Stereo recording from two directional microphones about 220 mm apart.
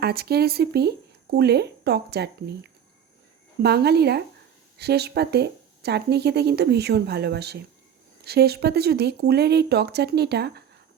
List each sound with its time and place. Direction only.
0.0 s speech: 45° right (ahead or behind)
3.6 s speech: 50° right (ahead or behind)